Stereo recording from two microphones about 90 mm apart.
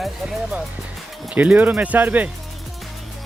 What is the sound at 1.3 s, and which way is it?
Speech, 15° right (ahead or behind).